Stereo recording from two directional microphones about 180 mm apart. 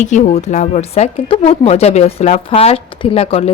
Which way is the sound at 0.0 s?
40° left (ahead or behind).